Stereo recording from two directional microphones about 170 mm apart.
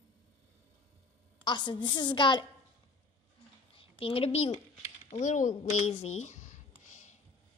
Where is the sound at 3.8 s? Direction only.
30° left (ahead or behind).